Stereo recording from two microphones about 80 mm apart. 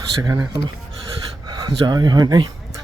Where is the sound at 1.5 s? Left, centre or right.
Right.